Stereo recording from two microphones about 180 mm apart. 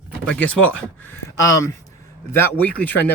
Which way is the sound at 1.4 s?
20° left (ahead or behind).